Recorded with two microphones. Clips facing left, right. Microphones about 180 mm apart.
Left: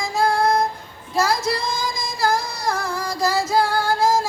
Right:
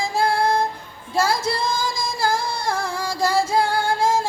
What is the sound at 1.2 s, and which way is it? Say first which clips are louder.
Singing: even; 30° right (ahead or behind).